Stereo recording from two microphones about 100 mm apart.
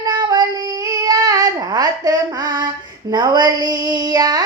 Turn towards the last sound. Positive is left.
turn(degrees=-40)  # may be behind; listen again after turning